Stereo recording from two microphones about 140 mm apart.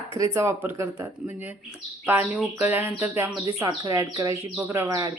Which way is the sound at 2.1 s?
10° right (ahead or behind).